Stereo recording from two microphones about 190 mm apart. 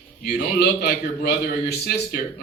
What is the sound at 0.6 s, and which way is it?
Speech, 60° left (ahead or behind).